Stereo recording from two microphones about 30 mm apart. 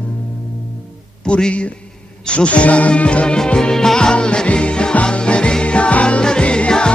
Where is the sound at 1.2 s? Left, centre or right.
Left.